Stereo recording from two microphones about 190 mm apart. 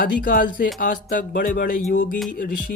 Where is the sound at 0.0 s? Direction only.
50° left (ahead or behind).